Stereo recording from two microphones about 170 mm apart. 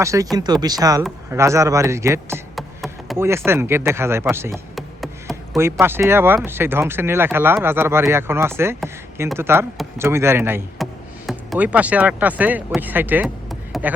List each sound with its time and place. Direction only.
0.0 s speech: 20° right (ahead or behind)
2.6 s a sound: centre (ahead or behind)
3.2 s speech: 15° right (ahead or behind)
4.7 s chop: centre (ahead or behind)
5.8 s speech: 15° right (ahead or behind)
10.8 s music: centre (ahead or behind)
11.3 s speech: 5° right (ahead or behind)
13.2 s a sound: centre (ahead or behind)